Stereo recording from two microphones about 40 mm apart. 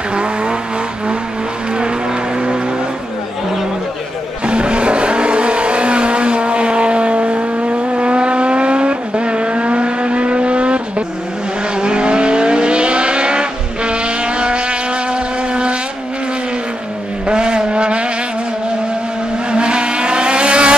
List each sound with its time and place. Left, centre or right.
0.1 s vehicle: right
4.5 s vehicle: right
17.3 s vehicle: right
19.5 s vehicle: right